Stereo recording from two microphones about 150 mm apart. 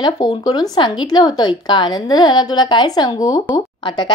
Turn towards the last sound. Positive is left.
turn(degrees=30)  # may be behind; listen again after turning